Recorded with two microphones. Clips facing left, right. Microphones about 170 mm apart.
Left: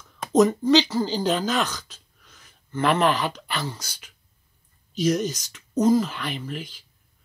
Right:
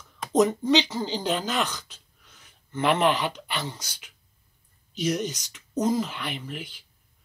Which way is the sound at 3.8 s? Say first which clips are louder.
Left 2 dB; 40° left (ahead or behind).